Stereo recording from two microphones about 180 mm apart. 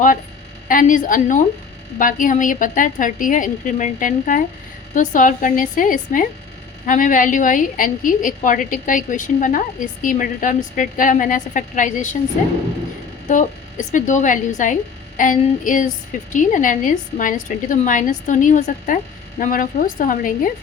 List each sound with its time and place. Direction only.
0.7 s a woman's voice: 50° left (ahead or behind)
13.2 s a woman's voice: 45° left (ahead or behind)